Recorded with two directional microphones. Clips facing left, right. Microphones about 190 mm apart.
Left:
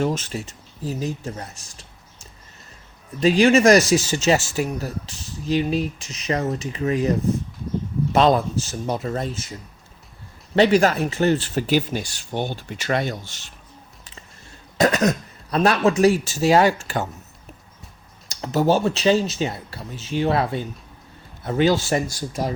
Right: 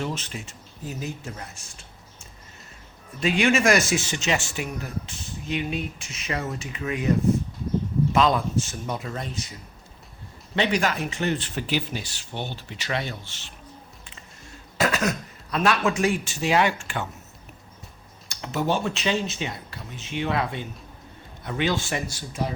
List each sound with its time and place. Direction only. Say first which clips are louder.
0.0 s speech: left 7 dB; 45° left (ahead or behind)
3.2 s speech: left 6 dB; 35° left (ahead or behind)
8.1 s speech: left 5 dB; 35° left (ahead or behind)
10.5 s speech: left 8 dB; 40° left (ahead or behind)
14.8 s speech: left 6 dB; 40° left (ahead or behind)
18.3 s speech: left 6 dB; 35° left (ahead or behind)